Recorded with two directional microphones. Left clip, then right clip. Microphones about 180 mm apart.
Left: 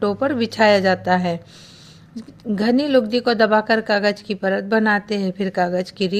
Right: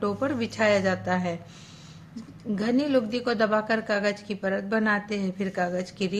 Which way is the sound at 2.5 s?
45° left (ahead or behind).